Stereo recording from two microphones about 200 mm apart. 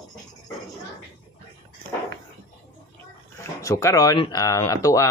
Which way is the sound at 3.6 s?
15° left (ahead or behind).